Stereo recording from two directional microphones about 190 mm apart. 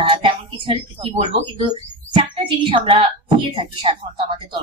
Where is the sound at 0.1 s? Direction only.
30° right (ahead or behind).